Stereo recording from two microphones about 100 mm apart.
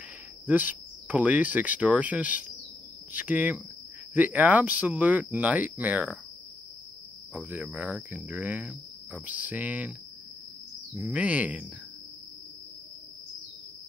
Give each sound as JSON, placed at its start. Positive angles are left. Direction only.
{"t": 0.5, "sound": "cricket", "side_deg": -15}
{"t": 7.3, "sound": "cricket", "side_deg": -15}
{"t": 11.1, "sound": "cricket", "side_deg": -15}